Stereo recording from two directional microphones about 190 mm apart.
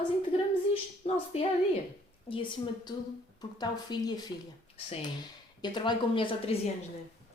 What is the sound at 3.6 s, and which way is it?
Speech, 20° left (ahead or behind).